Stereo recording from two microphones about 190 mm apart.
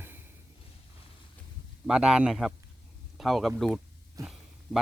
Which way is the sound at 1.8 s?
5° right (ahead or behind).